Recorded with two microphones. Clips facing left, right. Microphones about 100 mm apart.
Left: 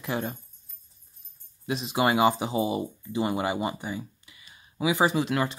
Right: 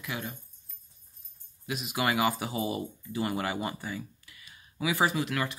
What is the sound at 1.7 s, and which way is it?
Speech, 30° left (ahead or behind).